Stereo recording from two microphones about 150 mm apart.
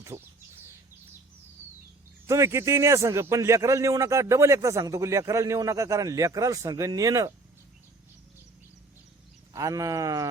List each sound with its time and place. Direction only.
0.1 s bird: 15° right (ahead or behind)
2.2 s a man's voice: 20° right (ahead or behind)
9.5 s a man's voice: 20° right (ahead or behind)